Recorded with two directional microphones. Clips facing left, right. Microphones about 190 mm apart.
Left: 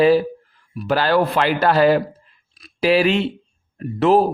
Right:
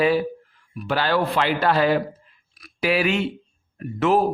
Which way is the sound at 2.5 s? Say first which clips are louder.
Left 5 dB; 30° left (ahead or behind).